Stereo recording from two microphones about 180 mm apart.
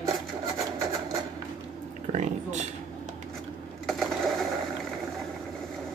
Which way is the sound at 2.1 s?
40° right (ahead or behind).